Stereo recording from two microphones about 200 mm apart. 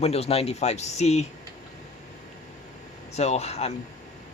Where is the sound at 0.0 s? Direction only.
30° left (ahead or behind).